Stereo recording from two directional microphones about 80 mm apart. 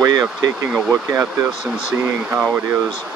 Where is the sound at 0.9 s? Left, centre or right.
Right.